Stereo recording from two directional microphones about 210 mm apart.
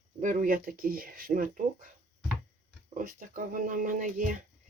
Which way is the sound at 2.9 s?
40° right (ahead or behind).